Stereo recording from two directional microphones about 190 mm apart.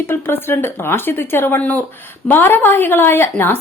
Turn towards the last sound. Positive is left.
turn(degrees=10)  # may be behind; listen again after turning